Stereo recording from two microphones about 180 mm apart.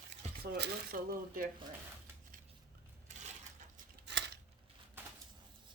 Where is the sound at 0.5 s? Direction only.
60° right (ahead or behind).